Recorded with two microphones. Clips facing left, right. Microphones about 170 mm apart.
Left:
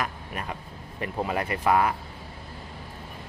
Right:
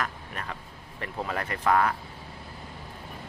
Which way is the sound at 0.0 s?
15° left (ahead or behind).